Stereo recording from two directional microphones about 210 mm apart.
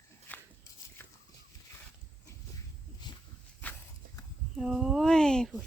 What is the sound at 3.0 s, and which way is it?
Dog, 20° left (ahead or behind).